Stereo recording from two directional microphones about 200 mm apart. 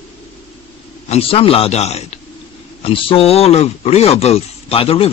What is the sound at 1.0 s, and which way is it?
A man's voice, 30° left (ahead or behind).